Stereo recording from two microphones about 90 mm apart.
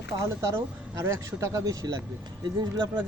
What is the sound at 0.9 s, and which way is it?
Speech, 35° right (ahead or behind).